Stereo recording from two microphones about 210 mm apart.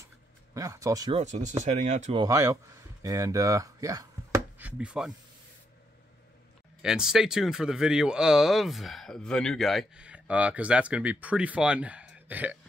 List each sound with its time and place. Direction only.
0.6 s speech: 15° right (ahead or behind)
1.1 s speech: 35° right (ahead or behind)
2.2 s speech: 15° right (ahead or behind)
6.8 s speech: 5° right (ahead or behind)